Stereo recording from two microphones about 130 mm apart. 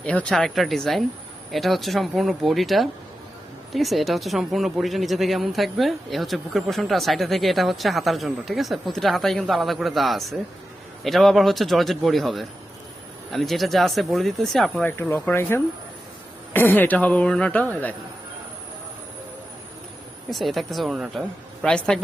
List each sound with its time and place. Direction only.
0.0 s speech: 10° left (ahead or behind)
14.8 s speech: 15° left (ahead or behind)
20.3 s speech: centre (ahead or behind)